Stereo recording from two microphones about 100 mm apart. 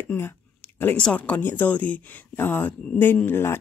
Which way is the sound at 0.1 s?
20° left (ahead or behind).